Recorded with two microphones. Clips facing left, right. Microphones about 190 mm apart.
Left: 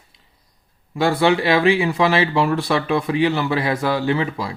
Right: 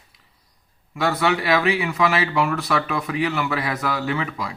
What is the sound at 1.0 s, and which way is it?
Speech, 30° left (ahead or behind).